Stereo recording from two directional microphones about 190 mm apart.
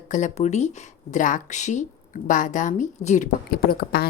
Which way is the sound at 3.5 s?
55° left (ahead or behind).